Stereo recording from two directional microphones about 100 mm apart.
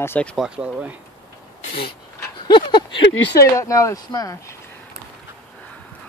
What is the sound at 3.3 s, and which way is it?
Speech, 35° left (ahead or behind).